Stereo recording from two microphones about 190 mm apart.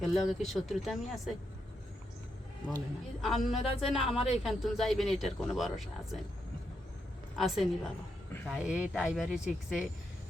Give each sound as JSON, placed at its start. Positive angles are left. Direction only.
{"t": 0.0, "sound": "speech", "side_deg": 0}
{"t": 2.6, "sound": "speech", "side_deg": 0}
{"t": 3.6, "sound": "speech", "side_deg": 35}
{"t": 3.9, "sound": "speech", "side_deg": 0}
{"t": 7.3, "sound": "speech", "side_deg": 0}